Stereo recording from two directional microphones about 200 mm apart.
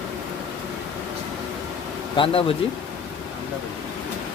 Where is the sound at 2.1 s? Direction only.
25° left (ahead or behind).